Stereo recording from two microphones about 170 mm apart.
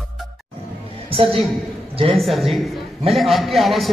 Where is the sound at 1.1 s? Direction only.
35° right (ahead or behind).